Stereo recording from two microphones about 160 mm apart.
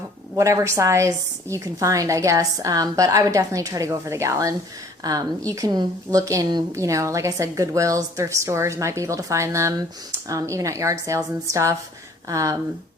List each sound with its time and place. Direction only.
0.3 s a woman's voice: 20° right (ahead or behind)